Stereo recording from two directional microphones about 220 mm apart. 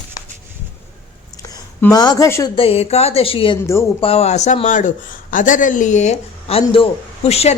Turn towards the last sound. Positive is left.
turn(degrees=30)  # may be behind; listen again after turning